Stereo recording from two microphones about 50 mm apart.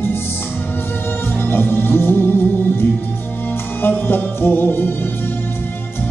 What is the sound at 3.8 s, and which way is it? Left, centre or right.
Music, left.